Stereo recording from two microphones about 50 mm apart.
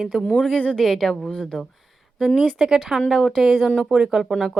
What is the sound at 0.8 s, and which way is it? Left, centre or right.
Speech, centre.